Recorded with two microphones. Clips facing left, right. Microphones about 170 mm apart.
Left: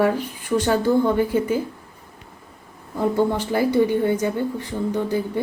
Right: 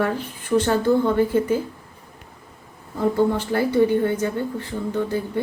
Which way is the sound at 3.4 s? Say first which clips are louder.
Even; 15° left (ahead or behind).